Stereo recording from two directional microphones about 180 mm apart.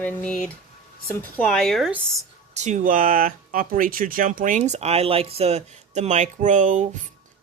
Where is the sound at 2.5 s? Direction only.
40° right (ahead or behind).